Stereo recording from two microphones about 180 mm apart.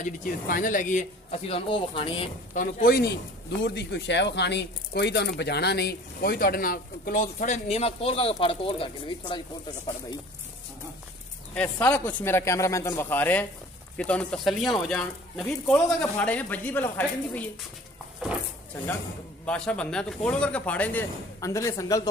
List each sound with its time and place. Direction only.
0.2 s speech: 50° left (ahead or behind); by 2.2 s 30° left (ahead or behind)
2.5 s speech: 50° left (ahead or behind)
3.6 s speech: 70° left (ahead or behind); by 9.8 s 25° left (ahead or behind)
11.5 s speech: 5° left (ahead or behind)
19.4 s speech: 5° left (ahead or behind)